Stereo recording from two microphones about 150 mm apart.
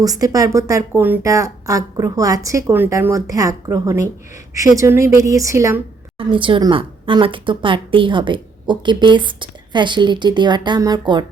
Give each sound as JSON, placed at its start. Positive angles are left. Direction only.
{"t": 0.0, "sound": "speech", "side_deg": -25}
{"t": 6.1, "sound": "speech", "side_deg": -35}